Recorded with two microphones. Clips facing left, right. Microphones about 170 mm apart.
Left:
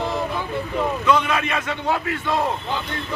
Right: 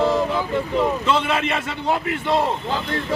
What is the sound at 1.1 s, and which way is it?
Speech, 30° right (ahead or behind).